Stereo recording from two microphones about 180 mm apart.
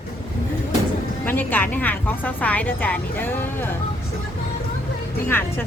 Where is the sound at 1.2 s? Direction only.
10° left (ahead or behind).